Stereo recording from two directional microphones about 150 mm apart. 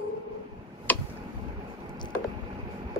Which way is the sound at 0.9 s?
10° left (ahead or behind).